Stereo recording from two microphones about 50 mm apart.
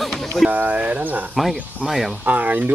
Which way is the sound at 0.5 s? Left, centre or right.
Right.